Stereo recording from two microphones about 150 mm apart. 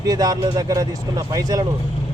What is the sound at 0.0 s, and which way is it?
A man's voice, 25° right (ahead or behind).